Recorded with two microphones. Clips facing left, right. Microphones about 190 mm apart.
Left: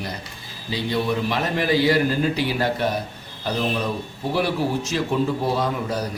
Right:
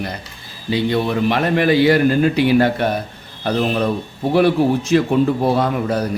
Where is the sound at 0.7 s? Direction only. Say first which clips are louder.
Right 5 dB; 60° right (ahead or behind).